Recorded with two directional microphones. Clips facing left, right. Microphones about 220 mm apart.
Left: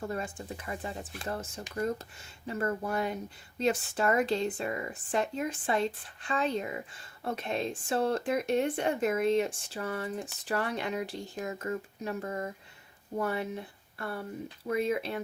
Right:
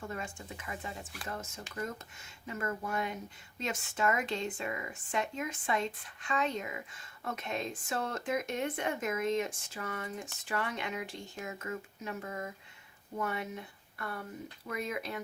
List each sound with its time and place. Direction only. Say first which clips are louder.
0.1 s speech: left 5 dB; 35° left (ahead or behind)